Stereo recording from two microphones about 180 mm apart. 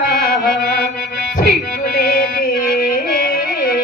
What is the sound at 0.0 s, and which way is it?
Music, 55° left (ahead or behind).